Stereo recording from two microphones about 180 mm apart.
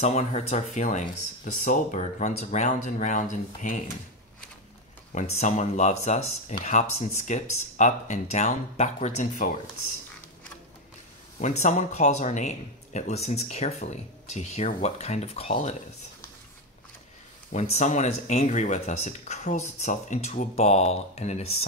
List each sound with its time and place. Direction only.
0.0 s speech: 40° left (ahead or behind)
5.3 s speech: 40° left (ahead or behind)
11.3 s speech: 40° left (ahead or behind)
17.5 s speech: 40° left (ahead or behind)